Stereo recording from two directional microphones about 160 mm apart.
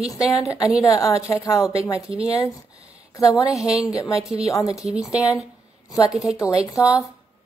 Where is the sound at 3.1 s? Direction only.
20° left (ahead or behind).